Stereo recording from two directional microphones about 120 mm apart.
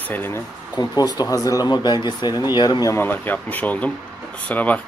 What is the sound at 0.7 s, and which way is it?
Speech, 35° left (ahead or behind).